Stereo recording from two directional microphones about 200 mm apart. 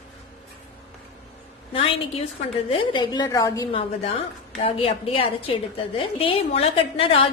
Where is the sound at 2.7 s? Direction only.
25° left (ahead or behind).